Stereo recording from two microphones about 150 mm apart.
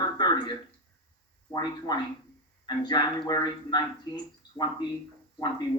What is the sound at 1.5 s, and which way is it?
Speech, 25° left (ahead or behind).